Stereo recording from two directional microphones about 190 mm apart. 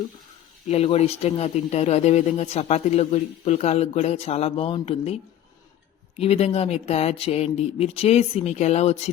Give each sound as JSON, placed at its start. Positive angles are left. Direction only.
{"t": 0.7, "sound": "speech", "side_deg": 35}